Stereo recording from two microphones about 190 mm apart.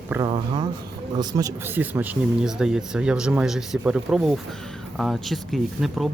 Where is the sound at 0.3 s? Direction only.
25° right (ahead or behind).